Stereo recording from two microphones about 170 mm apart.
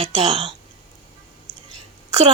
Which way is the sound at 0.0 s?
35° right (ahead or behind).